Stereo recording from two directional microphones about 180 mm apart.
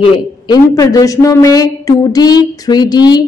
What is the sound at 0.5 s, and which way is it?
A woman's voice, 20° left (ahead or behind).